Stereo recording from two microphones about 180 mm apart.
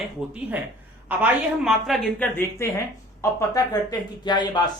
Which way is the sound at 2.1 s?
10° left (ahead or behind).